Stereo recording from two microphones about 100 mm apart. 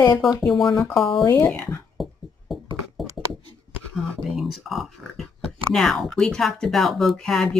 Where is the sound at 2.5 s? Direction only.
Centre (ahead or behind).